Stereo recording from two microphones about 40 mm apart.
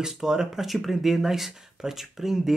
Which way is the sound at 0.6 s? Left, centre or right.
Centre.